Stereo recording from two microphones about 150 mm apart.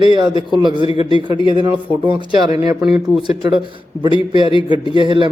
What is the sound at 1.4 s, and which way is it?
Speech, 30° left (ahead or behind).